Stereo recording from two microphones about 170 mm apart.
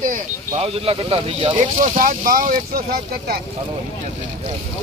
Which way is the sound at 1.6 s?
55° right (ahead or behind).